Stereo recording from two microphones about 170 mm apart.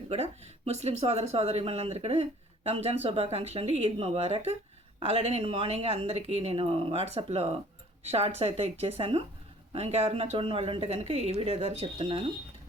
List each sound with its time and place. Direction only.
0.1 s speech: 40° right (ahead or behind)